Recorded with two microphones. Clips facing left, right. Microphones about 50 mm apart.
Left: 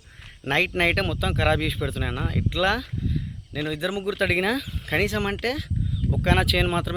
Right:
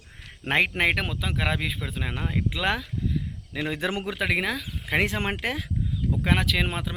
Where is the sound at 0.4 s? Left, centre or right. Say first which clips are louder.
Even; right.